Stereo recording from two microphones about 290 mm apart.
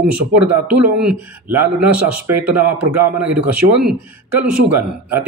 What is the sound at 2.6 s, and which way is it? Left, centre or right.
Speech, centre.